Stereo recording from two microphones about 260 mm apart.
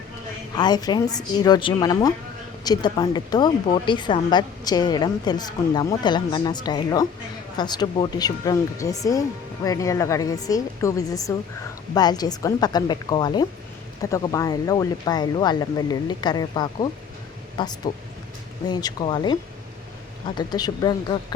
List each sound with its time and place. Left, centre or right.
0.5 s speech: centre